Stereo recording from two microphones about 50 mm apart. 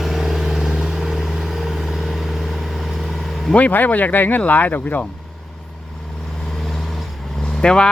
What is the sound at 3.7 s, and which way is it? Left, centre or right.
Speech, left.